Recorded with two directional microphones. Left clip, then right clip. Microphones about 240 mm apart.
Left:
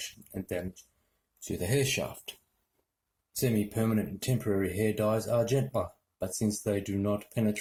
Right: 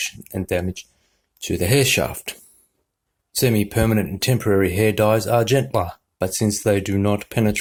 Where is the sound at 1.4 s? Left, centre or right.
Right.